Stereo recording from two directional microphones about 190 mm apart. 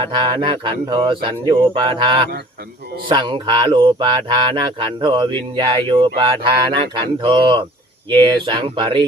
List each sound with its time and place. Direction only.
0.0 s mantra: 25° right (ahead or behind)